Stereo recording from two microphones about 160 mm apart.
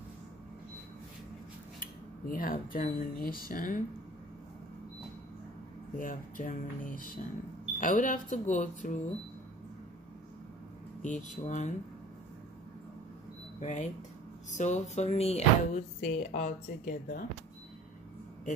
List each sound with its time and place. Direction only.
1.8 s speech: 60° left (ahead or behind)
5.9 s speech: 55° left (ahead or behind)
11.0 s speech: 50° left (ahead or behind)
13.6 s speech: 45° left (ahead or behind)